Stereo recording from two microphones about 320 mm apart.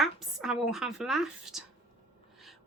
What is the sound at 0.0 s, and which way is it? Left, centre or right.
Speech, centre.